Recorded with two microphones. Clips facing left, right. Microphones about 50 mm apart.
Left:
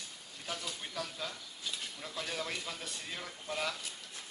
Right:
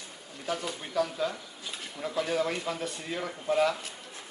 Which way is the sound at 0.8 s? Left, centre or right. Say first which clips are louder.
Right 11 dB; centre.